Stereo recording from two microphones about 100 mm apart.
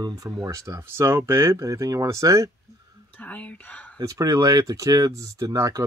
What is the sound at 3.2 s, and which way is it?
Speech, 15° left (ahead or behind).